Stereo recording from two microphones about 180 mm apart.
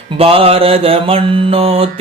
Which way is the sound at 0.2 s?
30° right (ahead or behind).